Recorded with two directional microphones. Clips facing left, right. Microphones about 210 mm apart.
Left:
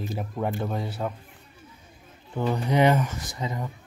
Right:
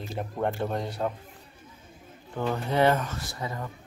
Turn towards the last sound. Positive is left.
turn(degrees=20)  # may be behind; listen again after turning